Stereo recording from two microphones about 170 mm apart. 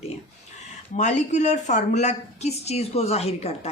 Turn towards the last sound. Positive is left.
turn(degrees=35)  # may be behind; listen again after turning